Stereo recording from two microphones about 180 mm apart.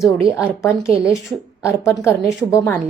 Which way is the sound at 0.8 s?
5° right (ahead or behind).